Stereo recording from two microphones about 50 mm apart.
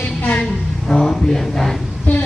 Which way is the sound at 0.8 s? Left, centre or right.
Centre.